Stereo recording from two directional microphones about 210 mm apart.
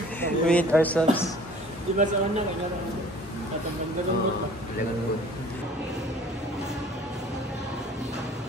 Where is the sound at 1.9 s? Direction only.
30° right (ahead or behind).